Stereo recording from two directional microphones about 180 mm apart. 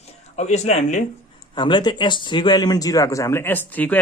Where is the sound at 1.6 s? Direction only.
25° left (ahead or behind).